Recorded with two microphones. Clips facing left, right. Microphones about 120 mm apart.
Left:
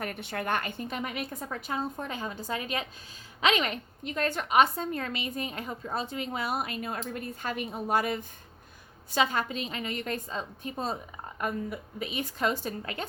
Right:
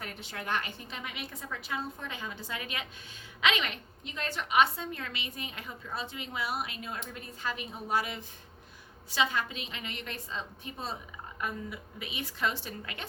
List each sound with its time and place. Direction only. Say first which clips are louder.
0.0 s a woman's voice: left 7 dB; 55° left (ahead or behind); by 13.1 s 40° left (ahead or behind)